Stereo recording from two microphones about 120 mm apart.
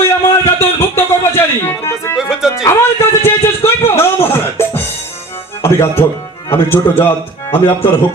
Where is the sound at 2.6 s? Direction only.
20° left (ahead or behind).